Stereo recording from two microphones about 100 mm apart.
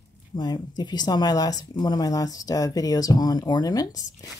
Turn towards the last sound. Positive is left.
turn(degrees=40)  # may be behind; listen again after turning